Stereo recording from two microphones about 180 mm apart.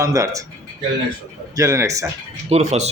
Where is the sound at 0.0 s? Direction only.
15° right (ahead or behind).